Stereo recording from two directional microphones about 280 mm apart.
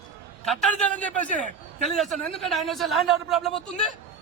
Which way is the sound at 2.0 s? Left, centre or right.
Centre.